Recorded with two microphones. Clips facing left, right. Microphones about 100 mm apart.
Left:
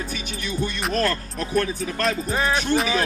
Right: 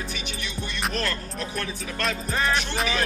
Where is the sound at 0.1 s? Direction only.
40° left (ahead or behind).